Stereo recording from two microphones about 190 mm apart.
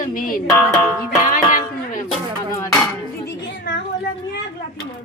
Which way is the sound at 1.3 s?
45° left (ahead or behind).